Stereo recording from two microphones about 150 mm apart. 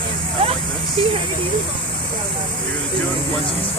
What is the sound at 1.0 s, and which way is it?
Speech, 40° right (ahead or behind).